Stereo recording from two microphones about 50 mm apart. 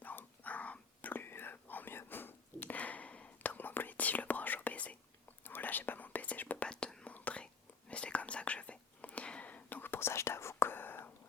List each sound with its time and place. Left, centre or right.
0.0 s whispering: left
5.5 s whispering: left
6.7 s whispering: centre; by 11.1 s left